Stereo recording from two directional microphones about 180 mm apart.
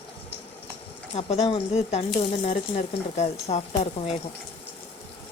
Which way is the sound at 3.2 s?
35° left (ahead or behind).